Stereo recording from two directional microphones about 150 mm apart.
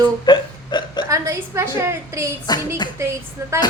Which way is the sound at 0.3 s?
30° left (ahead or behind).